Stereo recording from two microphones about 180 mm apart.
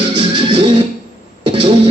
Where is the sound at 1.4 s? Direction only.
25° right (ahead or behind).